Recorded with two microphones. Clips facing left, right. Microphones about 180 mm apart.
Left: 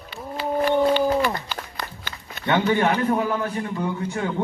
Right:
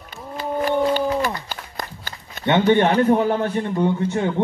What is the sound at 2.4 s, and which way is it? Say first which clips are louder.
A man's voice: right 4 dB; 25° right (ahead or behind).